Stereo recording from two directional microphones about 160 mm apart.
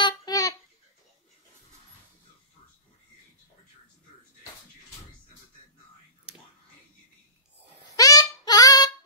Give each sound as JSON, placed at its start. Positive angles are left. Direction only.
{"t": 0.0, "sound": "babbling", "side_deg": 25}
{"t": 7.9, "sound": "child singing", "side_deg": 20}